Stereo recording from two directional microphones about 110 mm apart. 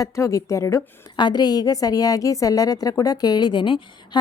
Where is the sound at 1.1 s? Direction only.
40° left (ahead or behind).